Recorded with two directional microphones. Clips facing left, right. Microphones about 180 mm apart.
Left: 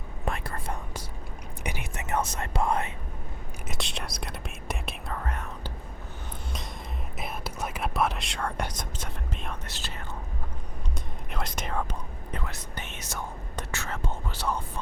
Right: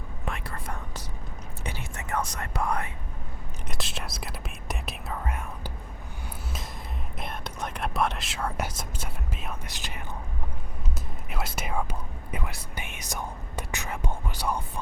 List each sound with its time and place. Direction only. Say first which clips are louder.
0.3 s whispering: left 3 dB; 40° left (ahead or behind)
1.6 s speech: left 2 dB; 15° left (ahead or behind)
3.7 s speech: even; centre (ahead or behind)
7.2 s speech: left 1 dB; 5° left (ahead or behind); by 10.0 s 15° right (ahead or behind)
11.3 s speech: right 1 dB; 5° right (ahead or behind)